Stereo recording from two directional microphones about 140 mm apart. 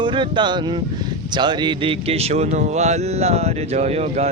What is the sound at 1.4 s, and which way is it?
Speech, 35° right (ahead or behind).